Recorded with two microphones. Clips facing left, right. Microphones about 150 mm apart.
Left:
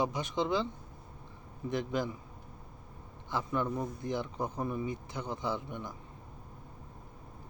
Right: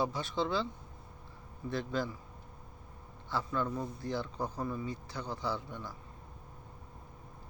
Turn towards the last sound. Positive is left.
turn(degrees=20)  # may be behind; listen again after turning